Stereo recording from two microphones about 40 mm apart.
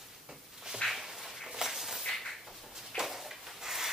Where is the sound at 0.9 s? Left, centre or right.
Centre.